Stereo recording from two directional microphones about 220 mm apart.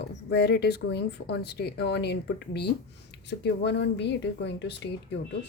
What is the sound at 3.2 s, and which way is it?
Speech, 50° left (ahead or behind).